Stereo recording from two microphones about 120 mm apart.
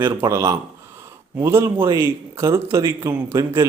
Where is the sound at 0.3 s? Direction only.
25° right (ahead or behind).